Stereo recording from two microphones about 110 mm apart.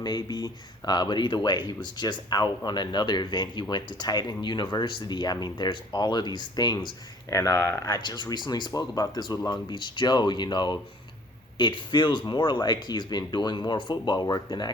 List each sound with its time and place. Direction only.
0.0 s speech: 40° left (ahead or behind)
7.3 s speech: 30° left (ahead or behind)
7.9 s speech: 40° left (ahead or behind)